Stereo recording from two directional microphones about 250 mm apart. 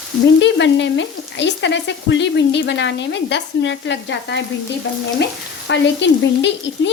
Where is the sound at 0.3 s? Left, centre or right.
Left.